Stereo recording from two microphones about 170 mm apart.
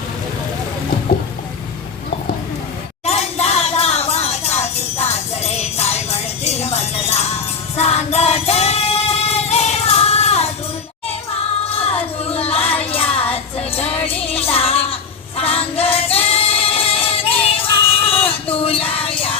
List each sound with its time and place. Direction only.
3.1 s music: 40° left (ahead or behind)
11.9 s a sound: 35° left (ahead or behind)
12.8 s music: 35° left (ahead or behind)
15.4 s singing: 35° left (ahead or behind)